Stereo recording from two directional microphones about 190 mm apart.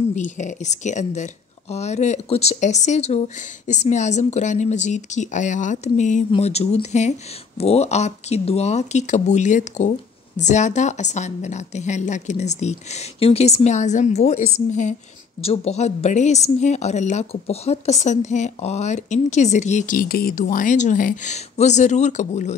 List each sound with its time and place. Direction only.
0.1 s speech: 40° left (ahead or behind)